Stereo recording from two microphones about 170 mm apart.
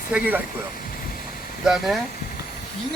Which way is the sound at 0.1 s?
10° right (ahead or behind).